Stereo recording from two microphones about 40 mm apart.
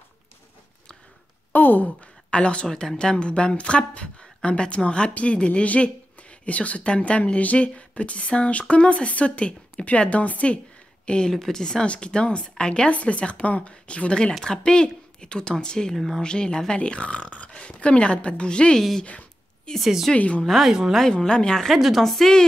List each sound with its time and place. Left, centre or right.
1.5 s a sound: left
2.3 s speech: left
11.1 s speech: left
11.8 s speech: left
12.9 s a woman's voice: left
19.8 s speech: centre
20.2 s speech: left
20.4 s speech: centre
21.1 s speech: left
21.6 s speech: centre